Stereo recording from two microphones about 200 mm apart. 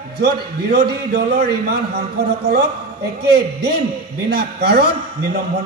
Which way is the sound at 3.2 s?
55° right (ahead or behind).